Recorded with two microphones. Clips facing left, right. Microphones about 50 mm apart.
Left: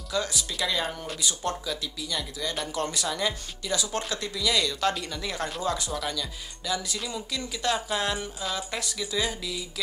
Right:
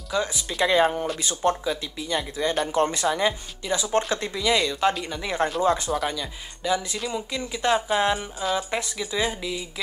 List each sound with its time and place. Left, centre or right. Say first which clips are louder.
0.1 s speech: right 3 dB; right